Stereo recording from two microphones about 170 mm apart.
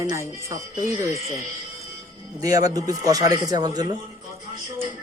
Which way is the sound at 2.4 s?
20° right (ahead or behind).